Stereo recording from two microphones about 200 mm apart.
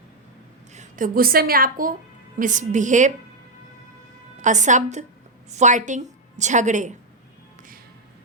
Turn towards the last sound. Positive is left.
turn(degrees=-40)  # may be behind; listen again after turning